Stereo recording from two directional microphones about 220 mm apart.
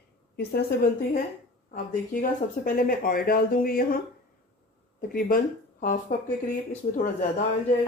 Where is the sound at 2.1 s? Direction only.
40° left (ahead or behind).